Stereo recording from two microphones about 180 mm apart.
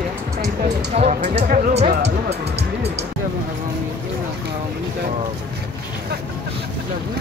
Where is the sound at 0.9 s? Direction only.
35° right (ahead or behind).